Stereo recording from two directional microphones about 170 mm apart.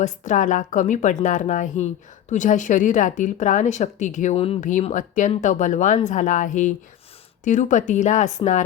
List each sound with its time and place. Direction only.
0.0 s a woman's voice: 50° left (ahead or behind)